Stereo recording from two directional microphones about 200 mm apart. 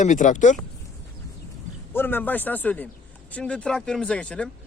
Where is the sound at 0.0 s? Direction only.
40° left (ahead or behind).